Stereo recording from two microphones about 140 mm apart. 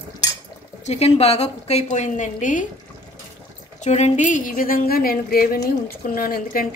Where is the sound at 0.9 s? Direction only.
45° left (ahead or behind); by 2.6 s 65° left (ahead or behind).